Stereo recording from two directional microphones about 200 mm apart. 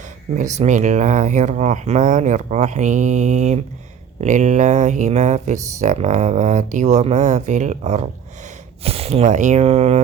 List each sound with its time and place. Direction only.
0.5 s speech: 35° right (ahead or behind)